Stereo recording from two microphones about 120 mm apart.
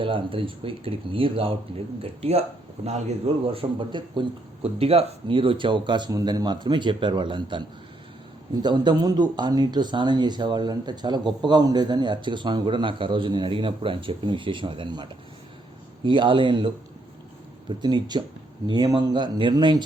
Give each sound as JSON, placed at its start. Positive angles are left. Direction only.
{"t": 0.0, "sound": "speech", "side_deg": -45}
{"t": 2.0, "sound": "speech", "side_deg": -60}
{"t": 4.6, "sound": "speech", "side_deg": -55}
{"t": 16.0, "sound": "speech", "side_deg": -40}